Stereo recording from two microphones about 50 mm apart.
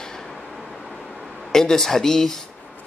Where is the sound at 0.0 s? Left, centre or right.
Centre.